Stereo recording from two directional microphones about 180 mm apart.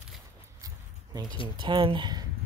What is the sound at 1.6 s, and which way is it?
Speech, 25° right (ahead or behind).